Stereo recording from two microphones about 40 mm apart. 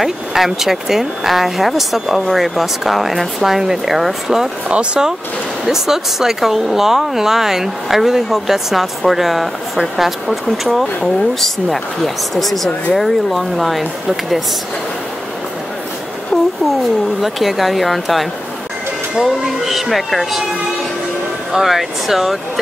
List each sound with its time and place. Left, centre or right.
0.0 s speech: centre
4.6 s speech: right
5.7 s speech: centre
17.2 s speech: centre
21.5 s speech: centre